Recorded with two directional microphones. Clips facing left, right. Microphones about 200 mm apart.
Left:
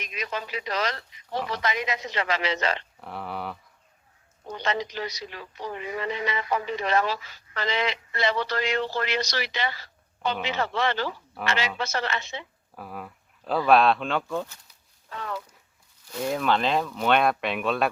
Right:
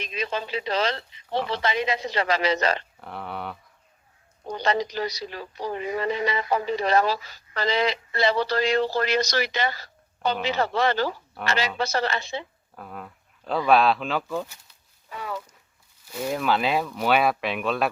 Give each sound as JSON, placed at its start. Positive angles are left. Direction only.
{"t": 0.0, "sound": "speech", "side_deg": -30}
{"t": 3.0, "sound": "a sound", "side_deg": 0}
{"t": 4.5, "sound": "speech", "side_deg": -35}
{"t": 12.7, "sound": "speech", "side_deg": 5}